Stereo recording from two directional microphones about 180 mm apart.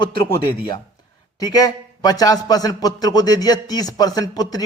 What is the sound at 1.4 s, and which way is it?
A man's voice, 20° left (ahead or behind).